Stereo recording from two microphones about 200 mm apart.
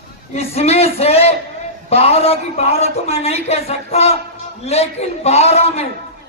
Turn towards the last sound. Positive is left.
turn(degrees=30)  # may be behind; listen again after turning